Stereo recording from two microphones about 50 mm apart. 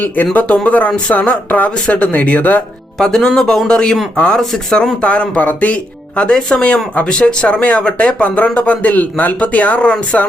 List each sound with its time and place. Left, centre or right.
0.3 s speech: left
1.1 s speech: left
3.0 s speech: centre
4.9 s speech: left